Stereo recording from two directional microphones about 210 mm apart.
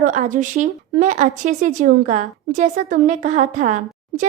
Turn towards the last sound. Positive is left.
turn(degrees=-35)  # may be behind; listen again after turning